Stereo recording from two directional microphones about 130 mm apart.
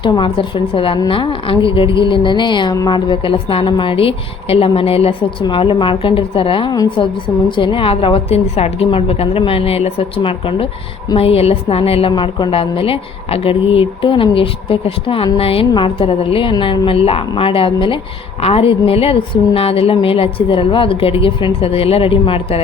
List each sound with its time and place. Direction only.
0.0 s a woman's voice: 40° left (ahead or behind)